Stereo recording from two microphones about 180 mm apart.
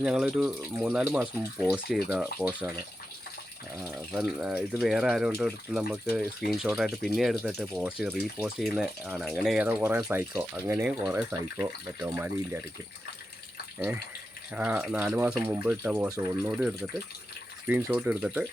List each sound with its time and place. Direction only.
0.0 s speech: centre (ahead or behind)
4.1 s speech: centre (ahead or behind)
11.6 s speech: 15° right (ahead or behind)
13.7 s speech: 10° right (ahead or behind)